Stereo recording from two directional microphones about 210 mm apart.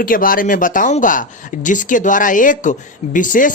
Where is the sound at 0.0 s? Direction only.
40° left (ahead or behind).